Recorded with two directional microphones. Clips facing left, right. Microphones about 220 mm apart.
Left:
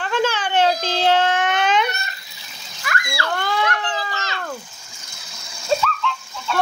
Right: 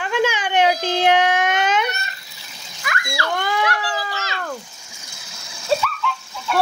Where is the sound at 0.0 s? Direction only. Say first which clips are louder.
Right 1 dB; 10° right (ahead or behind).